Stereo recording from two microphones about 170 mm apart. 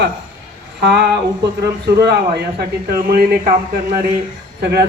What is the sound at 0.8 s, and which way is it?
Speech, 90° right.